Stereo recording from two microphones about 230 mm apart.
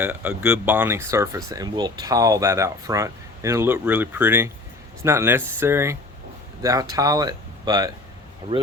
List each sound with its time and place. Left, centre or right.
0.0 s speech: centre